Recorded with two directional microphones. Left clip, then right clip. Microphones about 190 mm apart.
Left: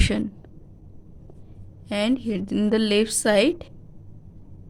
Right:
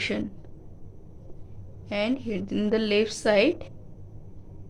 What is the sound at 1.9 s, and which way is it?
A woman's voice, 40° left (ahead or behind).